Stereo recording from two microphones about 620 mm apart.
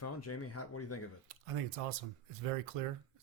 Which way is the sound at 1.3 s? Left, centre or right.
Right.